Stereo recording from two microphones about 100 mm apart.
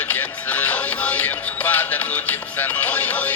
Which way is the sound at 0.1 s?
15° left (ahead or behind).